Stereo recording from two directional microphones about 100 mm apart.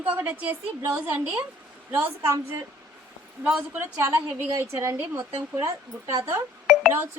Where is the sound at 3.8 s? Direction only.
30° right (ahead or behind).